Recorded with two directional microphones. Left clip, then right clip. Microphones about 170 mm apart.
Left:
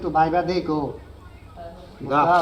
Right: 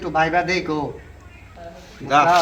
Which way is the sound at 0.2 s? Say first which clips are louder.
Right 1 dB; 10° right (ahead or behind).